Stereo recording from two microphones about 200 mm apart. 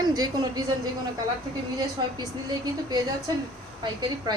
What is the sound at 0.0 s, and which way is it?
Speech, 20° right (ahead or behind).